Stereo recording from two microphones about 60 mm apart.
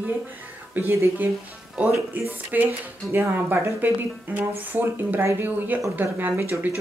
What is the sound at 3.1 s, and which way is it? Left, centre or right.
Speech, right.